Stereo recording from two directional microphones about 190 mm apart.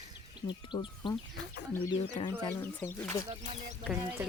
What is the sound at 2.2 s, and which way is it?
Speech, 30° left (ahead or behind).